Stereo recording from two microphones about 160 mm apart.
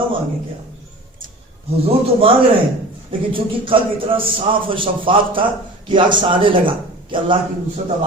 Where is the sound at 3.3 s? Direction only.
35° right (ahead or behind).